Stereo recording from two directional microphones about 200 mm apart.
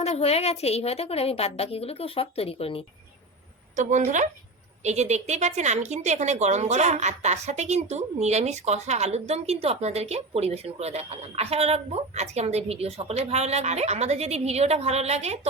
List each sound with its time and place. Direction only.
0.0 s a woman's voice: 30° left (ahead or behind)
3.8 s a woman's voice: 40° right (ahead or behind)